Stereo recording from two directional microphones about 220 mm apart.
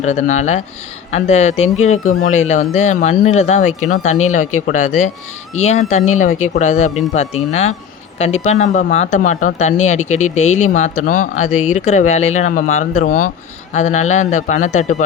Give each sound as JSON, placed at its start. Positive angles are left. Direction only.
{"t": 0.0, "sound": "speech", "side_deg": 35}